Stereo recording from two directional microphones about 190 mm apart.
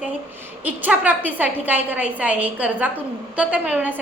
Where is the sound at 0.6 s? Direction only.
10° right (ahead or behind).